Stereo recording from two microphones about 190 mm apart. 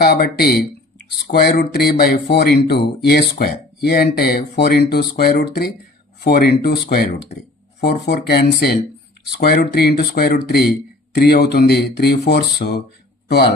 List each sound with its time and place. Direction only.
0.0 s speech: 55° left (ahead or behind)